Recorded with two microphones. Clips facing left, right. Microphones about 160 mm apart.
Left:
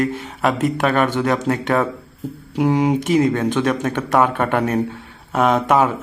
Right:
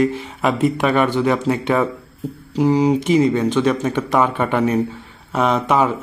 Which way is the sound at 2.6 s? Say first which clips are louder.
Right 2 dB; centre (ahead or behind).